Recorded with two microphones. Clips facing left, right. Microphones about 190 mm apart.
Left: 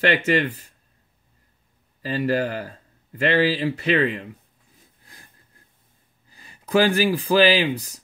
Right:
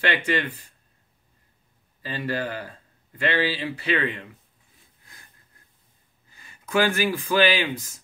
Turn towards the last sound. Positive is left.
turn(degrees=35)  # may be behind; listen again after turning